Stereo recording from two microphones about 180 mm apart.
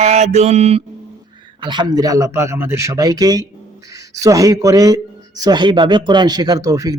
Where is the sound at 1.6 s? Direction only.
25° right (ahead or behind).